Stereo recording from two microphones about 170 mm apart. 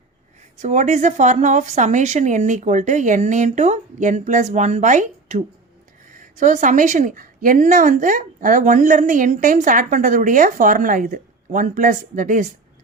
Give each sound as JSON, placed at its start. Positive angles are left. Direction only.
{"t": 0.6, "sound": "a woman's voice", "side_deg": -45}